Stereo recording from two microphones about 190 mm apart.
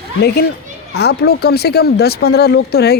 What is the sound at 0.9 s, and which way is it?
Speech, 60° left (ahead or behind).